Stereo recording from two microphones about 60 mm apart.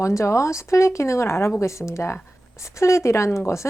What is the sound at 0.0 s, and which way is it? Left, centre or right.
A woman's voice, left.